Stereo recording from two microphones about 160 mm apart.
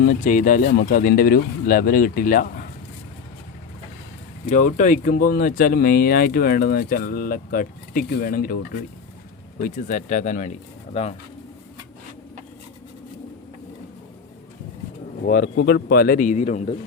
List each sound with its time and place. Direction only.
0.2 s speech: 55° left (ahead or behind)
4.4 s speech: 50° left (ahead or behind)
9.6 s speech: 55° left (ahead or behind)
15.2 s speech: 65° left (ahead or behind); by 16.7 s 45° left (ahead or behind)